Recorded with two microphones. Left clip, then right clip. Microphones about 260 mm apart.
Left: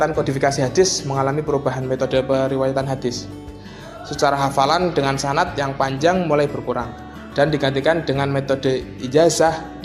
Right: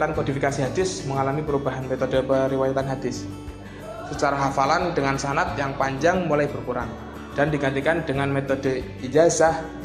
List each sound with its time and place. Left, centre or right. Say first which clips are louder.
0.0 s speech: left 5 dB; left